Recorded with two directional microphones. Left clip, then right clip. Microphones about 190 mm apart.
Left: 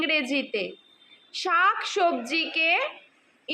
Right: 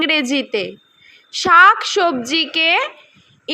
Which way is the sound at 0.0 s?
35° right (ahead or behind).